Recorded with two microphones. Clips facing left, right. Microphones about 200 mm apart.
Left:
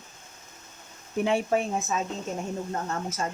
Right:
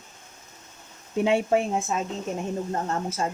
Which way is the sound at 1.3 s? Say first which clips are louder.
Right 3 dB; 25° right (ahead or behind).